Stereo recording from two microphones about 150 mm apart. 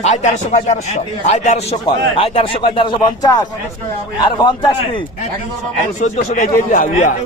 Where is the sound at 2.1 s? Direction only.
35° left (ahead or behind).